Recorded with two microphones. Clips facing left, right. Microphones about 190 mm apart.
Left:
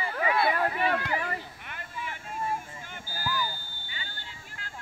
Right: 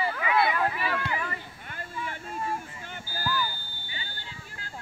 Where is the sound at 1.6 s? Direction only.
35° right (ahead or behind).